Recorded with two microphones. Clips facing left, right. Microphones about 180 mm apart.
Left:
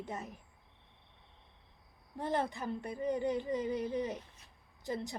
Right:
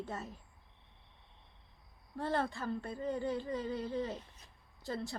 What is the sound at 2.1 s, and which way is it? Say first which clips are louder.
A woman's voice: left 1 dB; 20° left (ahead or behind).